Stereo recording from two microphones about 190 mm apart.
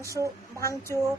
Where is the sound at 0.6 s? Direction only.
15° left (ahead or behind).